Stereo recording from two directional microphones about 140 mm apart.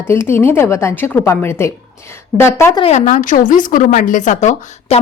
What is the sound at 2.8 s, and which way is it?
Speech, 45° left (ahead or behind).